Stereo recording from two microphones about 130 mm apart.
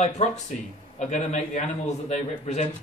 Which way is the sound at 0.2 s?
60° left (ahead or behind).